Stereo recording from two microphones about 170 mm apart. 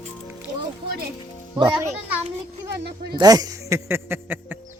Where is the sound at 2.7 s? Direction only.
75° right (ahead or behind).